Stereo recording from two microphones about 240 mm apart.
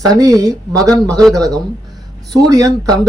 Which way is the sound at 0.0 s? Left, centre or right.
Centre.